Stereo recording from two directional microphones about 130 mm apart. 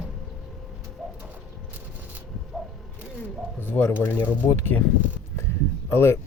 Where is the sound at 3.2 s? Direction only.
15° left (ahead or behind).